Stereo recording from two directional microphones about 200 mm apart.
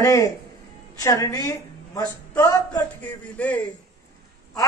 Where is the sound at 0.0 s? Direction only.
15° left (ahead or behind).